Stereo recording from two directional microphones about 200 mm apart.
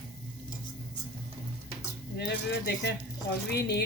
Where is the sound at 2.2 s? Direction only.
55° left (ahead or behind).